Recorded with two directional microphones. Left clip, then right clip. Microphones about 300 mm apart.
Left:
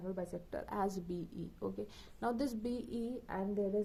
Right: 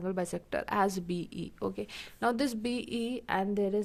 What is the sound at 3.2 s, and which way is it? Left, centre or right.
Speech, right.